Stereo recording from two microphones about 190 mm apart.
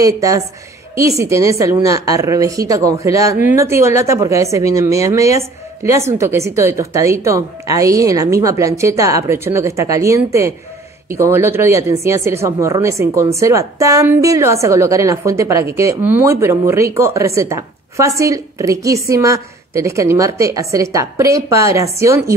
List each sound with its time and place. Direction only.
0.0 s a woman's voice: 20° right (ahead or behind)